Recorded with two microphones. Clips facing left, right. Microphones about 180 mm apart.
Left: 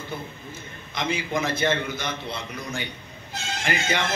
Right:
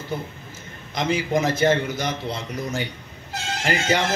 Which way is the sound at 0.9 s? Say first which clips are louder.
Right 5 dB; 40° right (ahead or behind).